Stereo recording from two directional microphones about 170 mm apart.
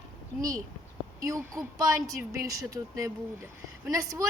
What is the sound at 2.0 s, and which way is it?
Speech, 20° right (ahead or behind).